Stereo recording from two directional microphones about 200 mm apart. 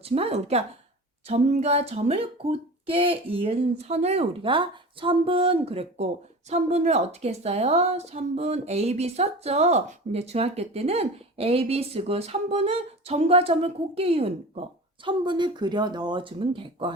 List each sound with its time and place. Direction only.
0.0 s a woman's voice: 30° right (ahead or behind)